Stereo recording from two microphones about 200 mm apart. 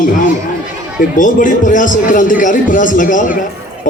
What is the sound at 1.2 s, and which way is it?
Speech, 40° left (ahead or behind).